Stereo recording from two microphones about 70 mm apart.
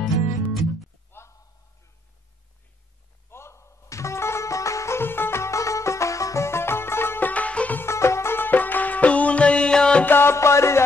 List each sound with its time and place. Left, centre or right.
0.0 s music: centre
1.1 s a sound: left
3.3 s music: left
7.8 s music: left; by 10.0 s centre
10.0 s music: left